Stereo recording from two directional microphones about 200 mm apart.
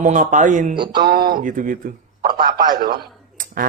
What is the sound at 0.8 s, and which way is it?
Speech, 20° right (ahead or behind).